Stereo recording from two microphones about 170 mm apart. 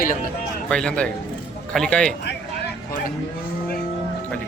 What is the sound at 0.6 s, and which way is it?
A man's voice, 5° left (ahead or behind).